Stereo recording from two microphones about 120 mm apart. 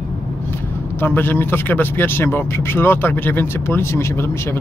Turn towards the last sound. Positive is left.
turn(degrees=20)  # may be behind; listen again after turning